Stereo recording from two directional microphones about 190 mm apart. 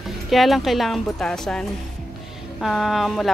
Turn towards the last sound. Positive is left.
turn(degrees=0)  # may be behind; listen again after turning